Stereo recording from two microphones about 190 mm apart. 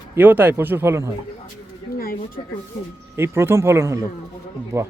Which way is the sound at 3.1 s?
15° right (ahead or behind).